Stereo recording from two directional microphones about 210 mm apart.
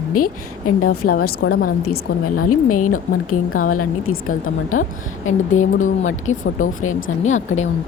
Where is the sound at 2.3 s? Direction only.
90° left.